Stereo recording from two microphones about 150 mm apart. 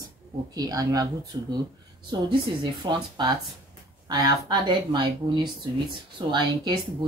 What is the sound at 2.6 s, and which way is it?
Speech, 30° right (ahead or behind).